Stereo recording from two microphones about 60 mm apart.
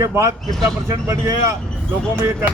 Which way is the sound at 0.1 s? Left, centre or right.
Right.